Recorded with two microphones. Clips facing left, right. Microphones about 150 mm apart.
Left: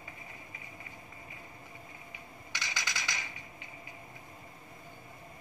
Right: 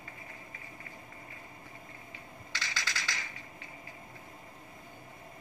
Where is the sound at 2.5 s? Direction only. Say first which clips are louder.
Even; 15° left (ahead or behind).